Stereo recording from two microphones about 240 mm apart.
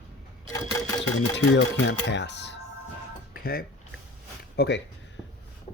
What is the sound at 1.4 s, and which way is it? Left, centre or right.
Speech, left.